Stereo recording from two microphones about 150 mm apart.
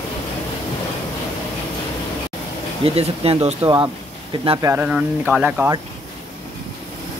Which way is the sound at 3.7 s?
30° right (ahead or behind).